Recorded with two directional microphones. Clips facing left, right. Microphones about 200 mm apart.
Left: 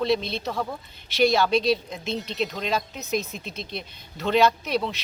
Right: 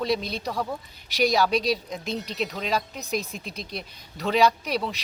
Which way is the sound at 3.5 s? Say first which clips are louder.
Left 1 dB; 35° right (ahead or behind).